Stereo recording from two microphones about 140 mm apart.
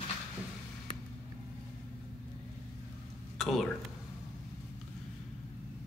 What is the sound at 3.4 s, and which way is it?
Speech, centre (ahead or behind).